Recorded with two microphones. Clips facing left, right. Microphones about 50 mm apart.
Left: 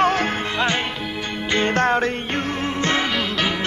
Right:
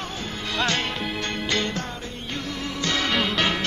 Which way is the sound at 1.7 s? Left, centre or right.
Left.